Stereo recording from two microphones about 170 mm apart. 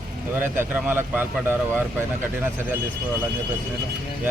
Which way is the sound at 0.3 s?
10° right (ahead or behind).